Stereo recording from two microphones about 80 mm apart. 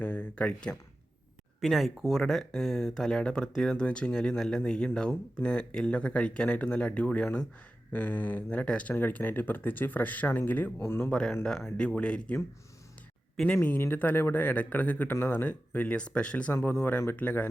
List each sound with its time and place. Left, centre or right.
0.0 s speech: centre
1.6 s speech: centre; by 11.1 s left
11.4 s speech: centre
13.6 s speech: left
16.5 s speech: left